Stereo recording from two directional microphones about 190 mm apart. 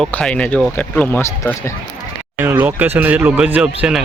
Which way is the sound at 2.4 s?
10° right (ahead or behind).